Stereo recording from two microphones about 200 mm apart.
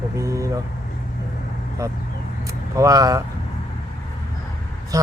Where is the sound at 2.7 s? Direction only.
15° right (ahead or behind).